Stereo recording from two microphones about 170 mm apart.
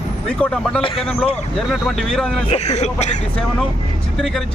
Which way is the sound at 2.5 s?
40° left (ahead or behind).